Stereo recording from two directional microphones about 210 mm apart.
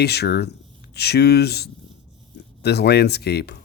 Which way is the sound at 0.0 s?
50° left (ahead or behind).